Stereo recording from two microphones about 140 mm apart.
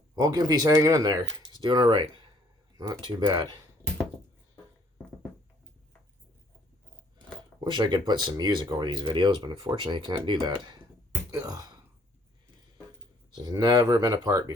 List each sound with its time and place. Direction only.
0.2 s speech: 30° right (ahead or behind)
2.7 s speech: 20° right (ahead or behind)
3.0 s speech: 35° right (ahead or behind)
7.6 s speech: 30° right (ahead or behind)
13.3 s speech: 25° right (ahead or behind)